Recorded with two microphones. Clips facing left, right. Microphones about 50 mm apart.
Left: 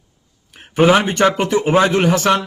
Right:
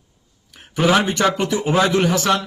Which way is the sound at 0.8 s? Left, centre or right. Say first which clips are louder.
Left 4 dB; left.